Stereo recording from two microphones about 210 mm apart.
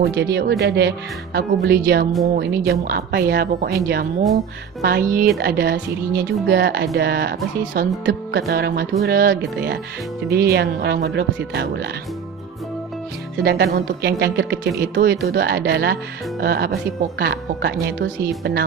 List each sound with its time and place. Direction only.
0.0 s speech: 50° right (ahead or behind)
4.8 s speech: 45° right (ahead or behind)
8.0 s speech: 55° right (ahead or behind)
13.4 s speech: 50° right (ahead or behind)